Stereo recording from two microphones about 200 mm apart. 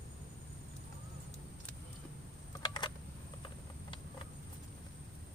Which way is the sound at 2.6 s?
20° left (ahead or behind).